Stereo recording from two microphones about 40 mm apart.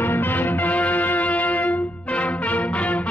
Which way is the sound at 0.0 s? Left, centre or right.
Left.